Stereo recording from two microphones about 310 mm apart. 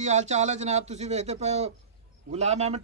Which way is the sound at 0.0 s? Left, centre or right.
Right.